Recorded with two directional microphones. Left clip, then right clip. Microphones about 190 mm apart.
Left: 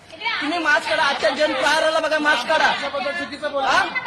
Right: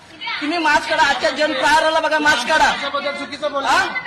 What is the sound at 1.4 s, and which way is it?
Speech, 20° left (ahead or behind).